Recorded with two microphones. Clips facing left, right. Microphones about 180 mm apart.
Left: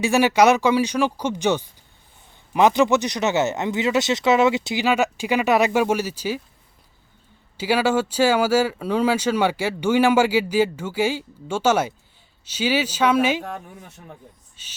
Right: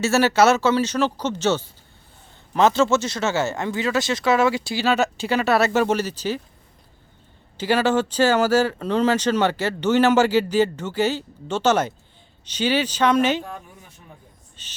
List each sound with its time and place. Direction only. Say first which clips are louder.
0.0 s speech: left 1 dB; 15° left (ahead or behind)
7.5 s speech: even; 10° left (ahead or behind)
14.6 s a sound: right 4 dB; 10° left (ahead or behind)